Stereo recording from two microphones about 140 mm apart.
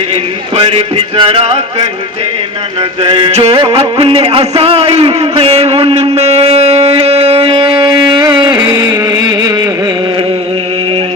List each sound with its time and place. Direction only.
0.5 s music: 40° right (ahead or behind)
3.0 s music: 35° right (ahead or behind)
3.8 s a sound: 40° right (ahead or behind)